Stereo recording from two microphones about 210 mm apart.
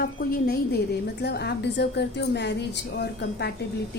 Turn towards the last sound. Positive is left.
turn(degrees=50)  # may be behind; listen again after turning